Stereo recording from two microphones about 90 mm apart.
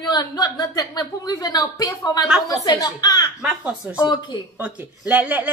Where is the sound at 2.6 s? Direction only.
50° left (ahead or behind).